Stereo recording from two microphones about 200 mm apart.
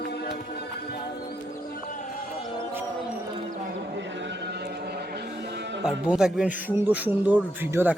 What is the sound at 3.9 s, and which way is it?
Music, 60° right (ahead or behind).